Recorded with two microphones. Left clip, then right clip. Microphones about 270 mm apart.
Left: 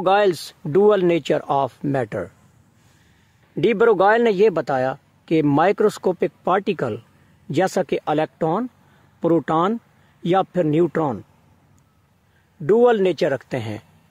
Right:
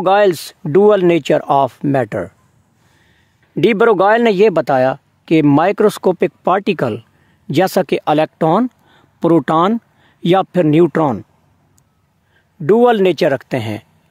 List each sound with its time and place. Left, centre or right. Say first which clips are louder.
0.0 s speech: right 5 dB; right
3.5 s speech: right 5 dB; right
12.6 s speech: right 5 dB; right